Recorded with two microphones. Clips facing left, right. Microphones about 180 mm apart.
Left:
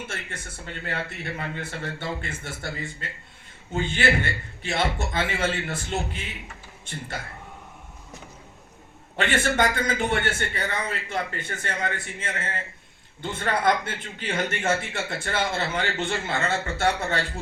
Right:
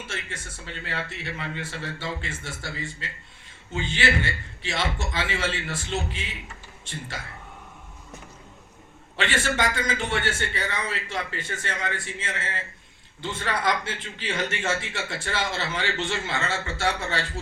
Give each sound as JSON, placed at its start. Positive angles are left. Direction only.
{"t": 0.1, "sound": "speech", "side_deg": 50}
{"t": 9.1, "sound": "speech", "side_deg": 55}